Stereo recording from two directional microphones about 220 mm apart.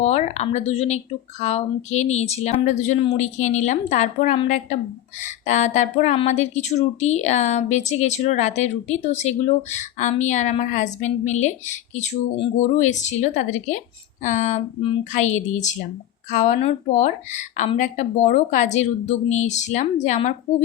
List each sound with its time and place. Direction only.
0.0 s speech: 30° left (ahead or behind)